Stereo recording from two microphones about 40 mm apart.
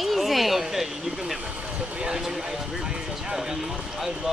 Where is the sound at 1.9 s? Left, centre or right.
Right.